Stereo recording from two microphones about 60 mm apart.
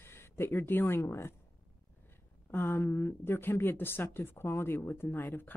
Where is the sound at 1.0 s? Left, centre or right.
Left.